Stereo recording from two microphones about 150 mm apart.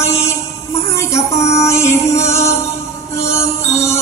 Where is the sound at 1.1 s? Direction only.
20° left (ahead or behind).